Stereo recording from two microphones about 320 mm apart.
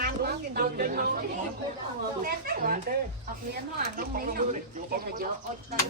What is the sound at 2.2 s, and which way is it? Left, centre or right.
Speech, right.